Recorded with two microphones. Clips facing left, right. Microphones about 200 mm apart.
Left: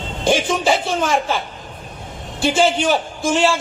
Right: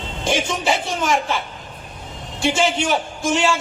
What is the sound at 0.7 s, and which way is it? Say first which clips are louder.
Speech: left 2 dB; 35° left (ahead or behind).